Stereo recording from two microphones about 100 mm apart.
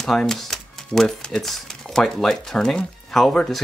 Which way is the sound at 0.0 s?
5° left (ahead or behind).